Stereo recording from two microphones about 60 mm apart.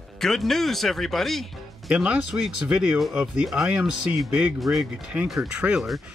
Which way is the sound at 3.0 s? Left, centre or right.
Centre.